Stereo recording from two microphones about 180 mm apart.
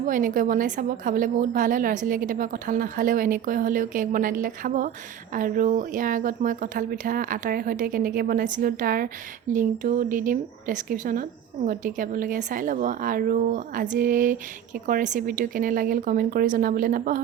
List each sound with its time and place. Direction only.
0.0 s speech: 45° right (ahead or behind)